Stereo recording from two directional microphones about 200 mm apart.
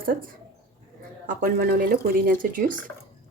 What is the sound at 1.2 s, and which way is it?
Speech, 45° right (ahead or behind).